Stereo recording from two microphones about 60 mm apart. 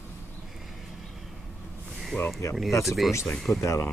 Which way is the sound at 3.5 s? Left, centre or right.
Left.